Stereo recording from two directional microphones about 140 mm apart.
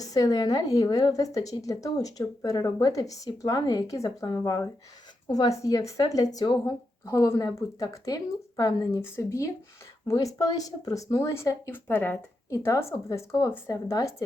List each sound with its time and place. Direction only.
0.0 s a woman's voice: 25° left (ahead or behind)